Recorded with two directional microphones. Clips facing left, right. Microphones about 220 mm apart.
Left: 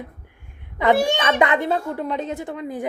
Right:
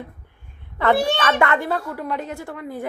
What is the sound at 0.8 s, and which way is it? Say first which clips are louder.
Speech: left 1 dB; 15° left (ahead or behind).